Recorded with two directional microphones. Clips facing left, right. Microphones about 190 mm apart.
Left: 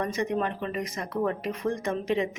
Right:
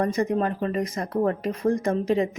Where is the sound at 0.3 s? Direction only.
40° right (ahead or behind).